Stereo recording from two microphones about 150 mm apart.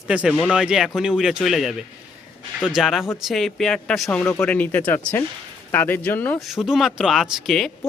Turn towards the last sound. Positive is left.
turn(degrees=0)  # may be behind; listen again after turning